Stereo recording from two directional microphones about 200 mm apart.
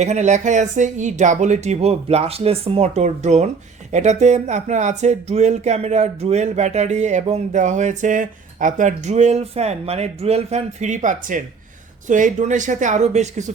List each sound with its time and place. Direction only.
0.0 s speech: 35° right (ahead or behind)